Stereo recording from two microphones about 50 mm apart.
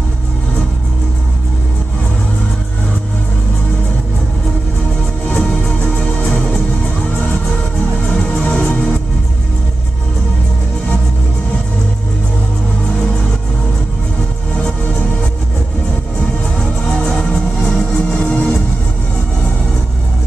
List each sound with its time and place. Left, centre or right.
8.1 s music: centre
16.9 s music: centre